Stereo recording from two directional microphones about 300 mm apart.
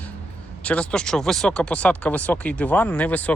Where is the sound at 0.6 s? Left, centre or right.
Centre.